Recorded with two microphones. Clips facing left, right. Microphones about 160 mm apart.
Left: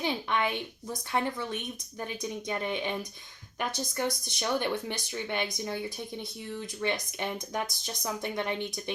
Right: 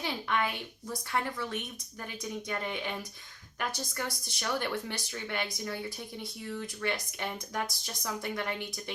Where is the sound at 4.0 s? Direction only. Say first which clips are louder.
Left 6 dB; 20° left (ahead or behind).